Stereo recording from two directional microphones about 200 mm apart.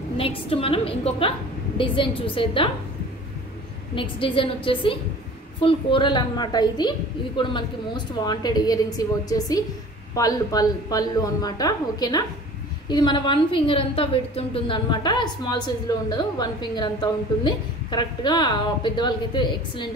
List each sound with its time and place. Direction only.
0.2 s a woman's voice: 30° left (ahead or behind)
3.9 s a woman's voice: 25° left (ahead or behind)